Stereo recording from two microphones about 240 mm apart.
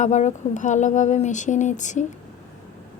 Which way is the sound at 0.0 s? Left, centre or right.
Left.